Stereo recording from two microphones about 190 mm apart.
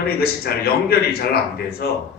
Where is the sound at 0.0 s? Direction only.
55° left (ahead or behind).